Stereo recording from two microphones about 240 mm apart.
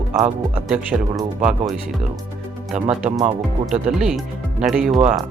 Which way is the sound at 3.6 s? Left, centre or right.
Centre.